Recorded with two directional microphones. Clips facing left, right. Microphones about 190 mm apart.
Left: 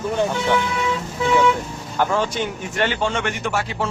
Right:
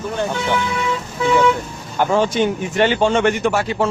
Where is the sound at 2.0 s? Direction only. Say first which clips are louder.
Right 5 dB; 20° right (ahead or behind).